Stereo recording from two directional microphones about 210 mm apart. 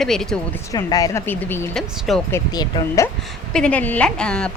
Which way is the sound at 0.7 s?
15° left (ahead or behind).